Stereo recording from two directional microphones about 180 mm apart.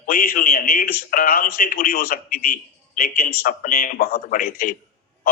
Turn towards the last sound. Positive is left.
turn(degrees=50)  # may be behind; listen again after turning